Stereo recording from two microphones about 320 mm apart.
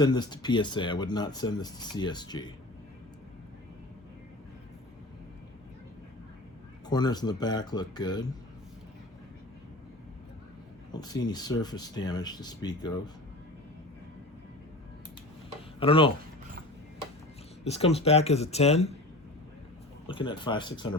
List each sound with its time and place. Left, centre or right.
0.0 s speech: centre
6.8 s speech: centre
10.9 s speech: centre
15.8 s speech: centre
17.6 s speech: centre
20.1 s speech: centre